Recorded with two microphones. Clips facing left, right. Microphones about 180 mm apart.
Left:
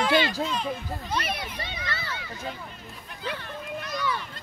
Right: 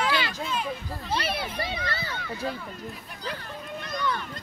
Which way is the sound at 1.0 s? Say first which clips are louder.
Right 2 dB; 30° right (ahead or behind).